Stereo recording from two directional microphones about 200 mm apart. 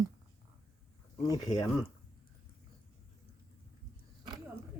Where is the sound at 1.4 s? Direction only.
20° left (ahead or behind).